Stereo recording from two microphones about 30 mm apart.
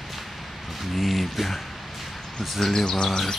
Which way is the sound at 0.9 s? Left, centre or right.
Centre.